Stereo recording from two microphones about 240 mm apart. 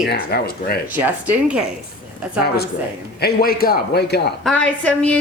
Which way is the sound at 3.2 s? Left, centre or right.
Left.